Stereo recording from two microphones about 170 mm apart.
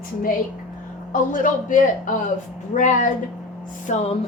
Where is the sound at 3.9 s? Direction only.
40° left (ahead or behind).